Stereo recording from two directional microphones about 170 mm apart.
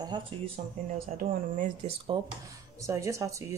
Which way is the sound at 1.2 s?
50° right (ahead or behind).